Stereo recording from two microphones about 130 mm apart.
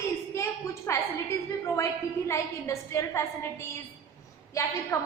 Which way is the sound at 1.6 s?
20° left (ahead or behind).